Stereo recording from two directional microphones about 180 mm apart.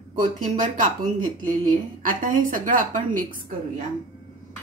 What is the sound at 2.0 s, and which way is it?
A woman's voice, 50° right (ahead or behind).